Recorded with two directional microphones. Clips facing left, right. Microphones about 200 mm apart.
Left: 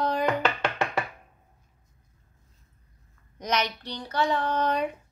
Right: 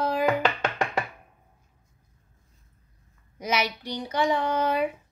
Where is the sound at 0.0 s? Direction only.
5° right (ahead or behind).